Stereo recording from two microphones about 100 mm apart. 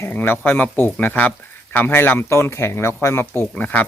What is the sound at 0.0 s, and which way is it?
Speech, 20° left (ahead or behind).